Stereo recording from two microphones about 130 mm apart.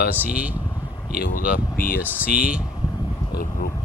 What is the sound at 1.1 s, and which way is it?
Speech, 90° left.